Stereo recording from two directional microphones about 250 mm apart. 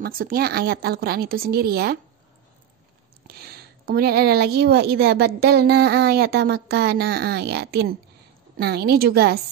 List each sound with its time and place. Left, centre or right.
0.0 s speech: right
3.3 s speech: right